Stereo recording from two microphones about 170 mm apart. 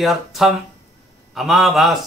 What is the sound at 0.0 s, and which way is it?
A man's voice, centre (ahead or behind).